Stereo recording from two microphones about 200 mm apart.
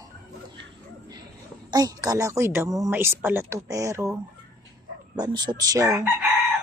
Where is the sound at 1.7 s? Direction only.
20° right (ahead or behind).